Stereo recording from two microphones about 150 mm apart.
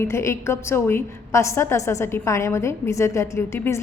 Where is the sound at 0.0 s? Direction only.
20° left (ahead or behind).